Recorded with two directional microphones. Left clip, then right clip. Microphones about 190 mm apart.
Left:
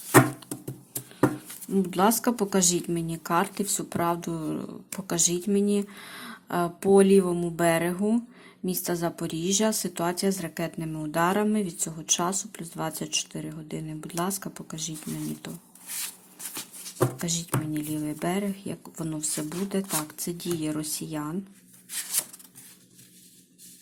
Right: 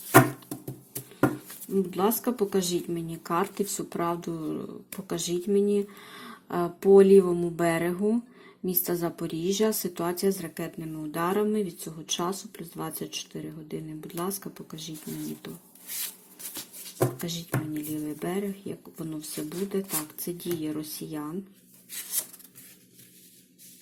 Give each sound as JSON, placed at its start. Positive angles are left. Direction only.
{"t": 1.6, "sound": "a woman's voice", "side_deg": 15}
{"t": 16.8, "sound": "a woman's voice", "side_deg": 15}